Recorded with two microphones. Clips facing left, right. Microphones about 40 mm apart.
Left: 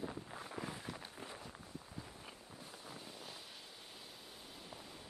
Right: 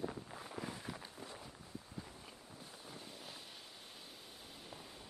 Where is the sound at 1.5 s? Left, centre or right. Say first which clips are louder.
Left 2 dB; left.